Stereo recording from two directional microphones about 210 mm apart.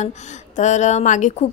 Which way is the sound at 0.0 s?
35° left (ahead or behind).